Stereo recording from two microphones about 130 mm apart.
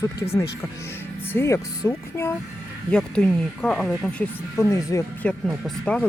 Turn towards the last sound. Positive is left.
turn(degrees=10)  # may be behind; listen again after turning